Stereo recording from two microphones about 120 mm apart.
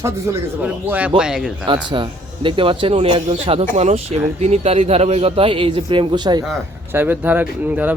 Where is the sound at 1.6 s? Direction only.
40° right (ahead or behind).